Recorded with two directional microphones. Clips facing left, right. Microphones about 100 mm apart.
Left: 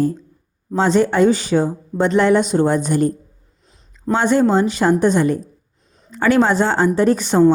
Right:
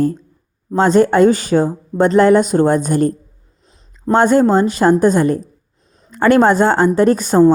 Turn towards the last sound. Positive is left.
turn(degrees=-45)  # may be behind; listen again after turning